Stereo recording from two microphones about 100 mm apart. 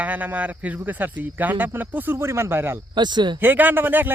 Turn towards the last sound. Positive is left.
turn(degrees=-20)  # may be behind; listen again after turning